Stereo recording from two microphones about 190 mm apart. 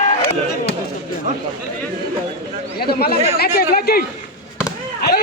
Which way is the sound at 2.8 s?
55° left (ahead or behind).